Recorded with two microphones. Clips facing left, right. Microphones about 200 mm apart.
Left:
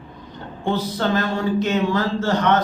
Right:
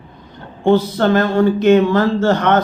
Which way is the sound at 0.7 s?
55° right (ahead or behind).